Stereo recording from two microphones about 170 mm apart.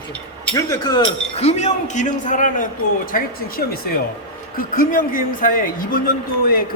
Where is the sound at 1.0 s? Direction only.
40° left (ahead or behind).